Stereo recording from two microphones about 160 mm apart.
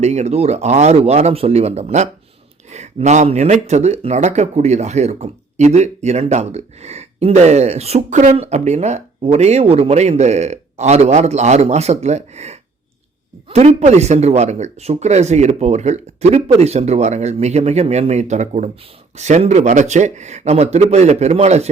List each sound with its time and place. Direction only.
0.0 s speech: 45° right (ahead or behind)